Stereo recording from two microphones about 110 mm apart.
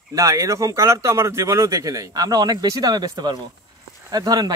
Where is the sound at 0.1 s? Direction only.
30° right (ahead or behind).